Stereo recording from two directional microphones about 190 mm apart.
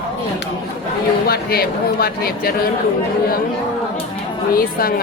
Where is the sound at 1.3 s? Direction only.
55° left (ahead or behind).